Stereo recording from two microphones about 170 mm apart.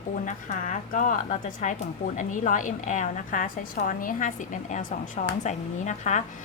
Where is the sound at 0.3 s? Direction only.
50° left (ahead or behind).